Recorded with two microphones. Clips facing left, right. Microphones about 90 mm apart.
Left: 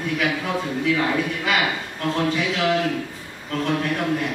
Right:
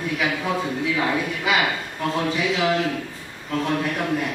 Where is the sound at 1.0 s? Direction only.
5° right (ahead or behind).